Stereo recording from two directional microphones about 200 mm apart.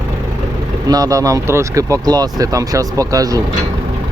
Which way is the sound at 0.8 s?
20° right (ahead or behind).